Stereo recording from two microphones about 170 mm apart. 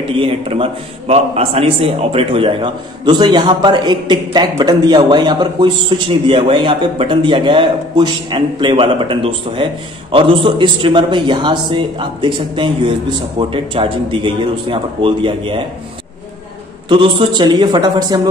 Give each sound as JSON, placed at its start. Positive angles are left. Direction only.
{"t": 0.2, "sound": "a man's voice", "side_deg": -35}
{"t": 16.9, "sound": "a man's voice", "side_deg": -30}